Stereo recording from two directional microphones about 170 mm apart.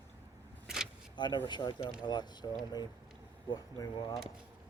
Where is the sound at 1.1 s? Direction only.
25° left (ahead or behind).